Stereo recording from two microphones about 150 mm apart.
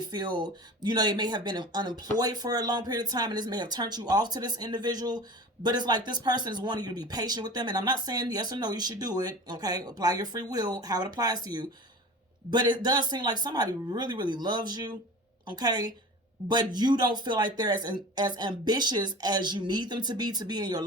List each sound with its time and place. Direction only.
0.1 s speech: 30° right (ahead or behind)